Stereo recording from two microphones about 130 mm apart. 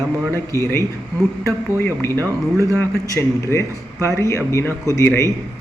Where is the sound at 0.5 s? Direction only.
20° left (ahead or behind).